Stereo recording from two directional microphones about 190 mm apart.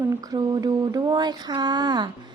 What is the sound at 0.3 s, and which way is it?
A woman's voice, 20° right (ahead or behind).